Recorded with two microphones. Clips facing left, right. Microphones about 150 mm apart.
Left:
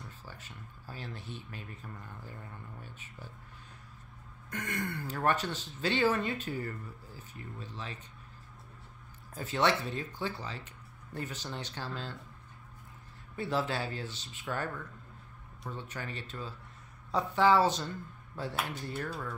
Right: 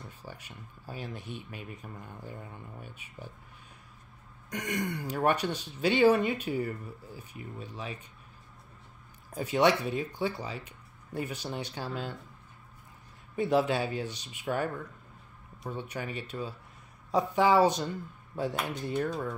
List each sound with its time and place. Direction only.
0.2 s speech: 15° right (ahead or behind)
4.5 s speech: 15° right (ahead or behind)
9.3 s speech: 15° right (ahead or behind)
13.4 s speech: 15° right (ahead or behind)
15.7 s speech: 15° right (ahead or behind)